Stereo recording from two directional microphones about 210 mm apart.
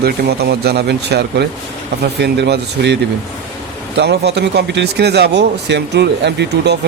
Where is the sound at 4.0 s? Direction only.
55° right (ahead or behind).